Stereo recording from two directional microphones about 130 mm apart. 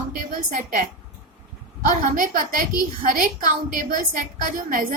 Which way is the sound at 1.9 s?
90° right.